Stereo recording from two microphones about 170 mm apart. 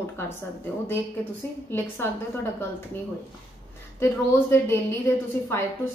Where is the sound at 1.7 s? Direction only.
15° left (ahead or behind).